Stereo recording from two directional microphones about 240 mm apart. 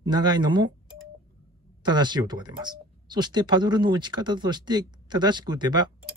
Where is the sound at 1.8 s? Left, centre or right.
Centre.